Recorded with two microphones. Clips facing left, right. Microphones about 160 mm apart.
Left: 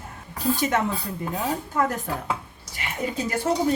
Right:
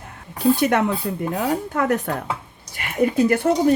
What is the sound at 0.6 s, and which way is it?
Speech, 65° right (ahead or behind).